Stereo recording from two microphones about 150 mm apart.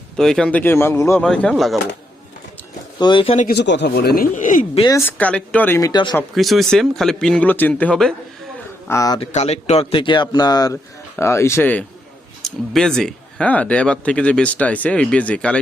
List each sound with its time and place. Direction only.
0.2 s speech: 5° left (ahead or behind)
1.2 s speech: 5° left (ahead or behind)
3.0 s a man's voice: 30° left (ahead or behind)
3.3 s speech: 80° left; by 4.6 s 60° left (ahead or behind)
4.9 s speech: 15° left (ahead or behind)
5.8 s speech: 30° left (ahead or behind)
6.3 s speech: centre (ahead or behind)
8.9 s speech: 25° left (ahead or behind)
9.3 s a man's voice: 45° left (ahead or behind); by 15.6 s 5° left (ahead or behind)